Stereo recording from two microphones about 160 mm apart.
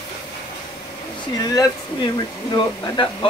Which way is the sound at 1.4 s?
25° left (ahead or behind).